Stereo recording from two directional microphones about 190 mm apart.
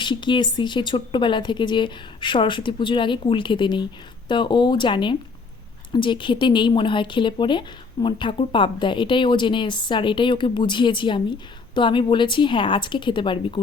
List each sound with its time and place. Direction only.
0.0 s a woman's voice: 25° left (ahead or behind)